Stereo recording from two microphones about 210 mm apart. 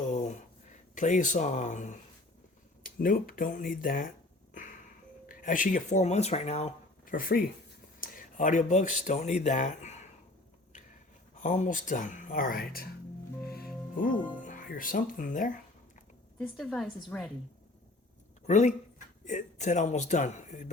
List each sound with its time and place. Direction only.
0.1 s a sound: 35° left (ahead or behind)
0.9 s speech: 35° left (ahead or behind)
5.3 s speech: 40° left (ahead or behind)
11.4 s speech: 35° left (ahead or behind)
13.9 s speech: 40° left (ahead or behind)
16.4 s a woman's voice: 5° left (ahead or behind)
18.4 s speech: 35° left (ahead or behind)